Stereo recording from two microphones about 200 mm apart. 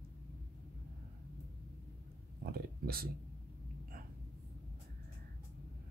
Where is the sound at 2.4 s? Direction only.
50° right (ahead or behind).